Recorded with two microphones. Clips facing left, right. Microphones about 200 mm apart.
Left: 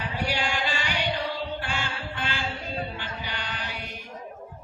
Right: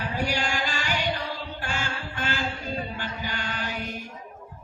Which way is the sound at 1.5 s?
45° right (ahead or behind).